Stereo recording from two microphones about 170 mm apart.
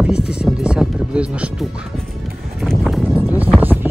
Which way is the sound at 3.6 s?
10° right (ahead or behind).